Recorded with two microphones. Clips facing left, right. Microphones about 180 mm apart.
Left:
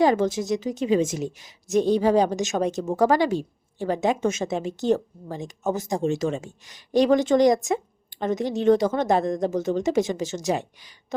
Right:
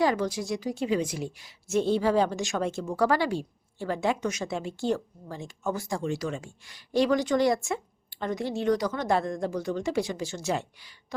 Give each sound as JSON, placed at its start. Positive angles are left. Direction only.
{"t": 0.0, "sound": "speech", "side_deg": 25}